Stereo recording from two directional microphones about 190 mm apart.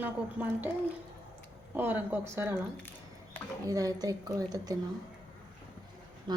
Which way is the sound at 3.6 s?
20° right (ahead or behind).